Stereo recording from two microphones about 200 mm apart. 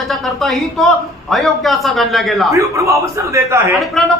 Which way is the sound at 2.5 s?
15° right (ahead or behind).